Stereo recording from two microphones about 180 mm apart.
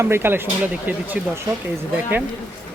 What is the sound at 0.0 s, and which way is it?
Speech, 15° right (ahead or behind).